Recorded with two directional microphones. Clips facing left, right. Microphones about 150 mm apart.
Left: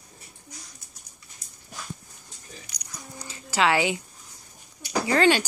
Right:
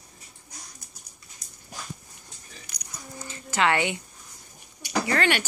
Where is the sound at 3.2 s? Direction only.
10° left (ahead or behind).